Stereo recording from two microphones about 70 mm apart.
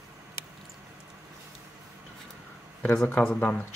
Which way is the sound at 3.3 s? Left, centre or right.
Left.